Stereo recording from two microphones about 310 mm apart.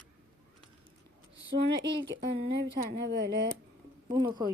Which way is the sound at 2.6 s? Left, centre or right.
Right.